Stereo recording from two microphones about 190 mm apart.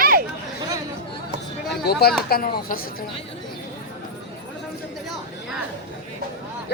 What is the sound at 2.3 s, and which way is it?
Speech, 50° left (ahead or behind).